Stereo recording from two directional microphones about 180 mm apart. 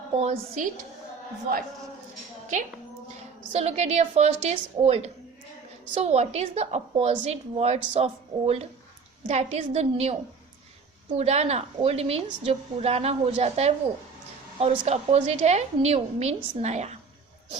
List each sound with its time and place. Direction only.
0.2 s a woman's voice: 35° right (ahead or behind)
2.5 s a woman's voice: 45° right (ahead or behind)
11.2 s a woman's voice: 35° right (ahead or behind)